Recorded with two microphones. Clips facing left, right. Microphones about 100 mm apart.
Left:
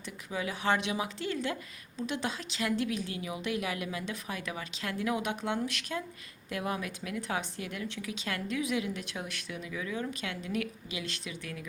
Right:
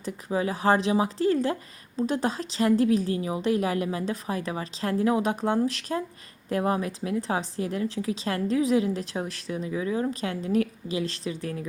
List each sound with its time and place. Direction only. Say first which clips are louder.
0.0 s a woman's voice: right 9 dB; 35° right (ahead or behind)